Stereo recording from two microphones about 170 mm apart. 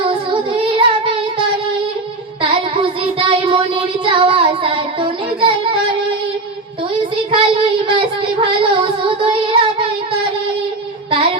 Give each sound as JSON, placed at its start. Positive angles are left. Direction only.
{"t": 0.0, "sound": "singing", "side_deg": -30}
{"t": 3.0, "sound": "child singing", "side_deg": -30}
{"t": 7.3, "sound": "child singing", "side_deg": -30}